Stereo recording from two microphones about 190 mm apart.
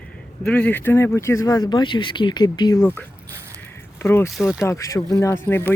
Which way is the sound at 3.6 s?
10° left (ahead or behind).